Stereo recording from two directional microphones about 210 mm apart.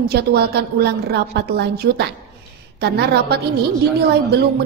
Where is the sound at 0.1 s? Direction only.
50° right (ahead or behind).